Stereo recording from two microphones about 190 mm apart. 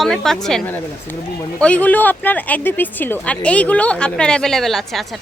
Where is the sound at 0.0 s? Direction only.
Centre (ahead or behind).